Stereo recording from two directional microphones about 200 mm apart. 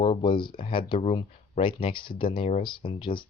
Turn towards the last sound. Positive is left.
turn(degrees=25)  # may be behind; listen again after turning